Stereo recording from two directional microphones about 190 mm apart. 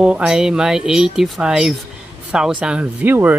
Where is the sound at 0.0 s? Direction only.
5° right (ahead or behind).